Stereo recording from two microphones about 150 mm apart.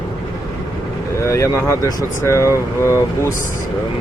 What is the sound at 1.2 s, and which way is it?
Speech, 20° left (ahead or behind).